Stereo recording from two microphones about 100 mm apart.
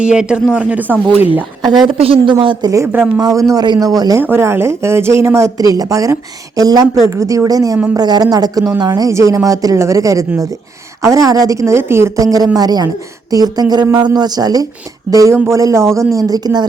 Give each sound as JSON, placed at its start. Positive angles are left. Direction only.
{"t": 0.0, "sound": "speech", "side_deg": -10}
{"t": 1.9, "sound": "speech", "side_deg": -65}
{"t": 2.6, "sound": "a woman's voice", "side_deg": -35}
{"t": 4.2, "sound": "a woman's voice", "side_deg": -25}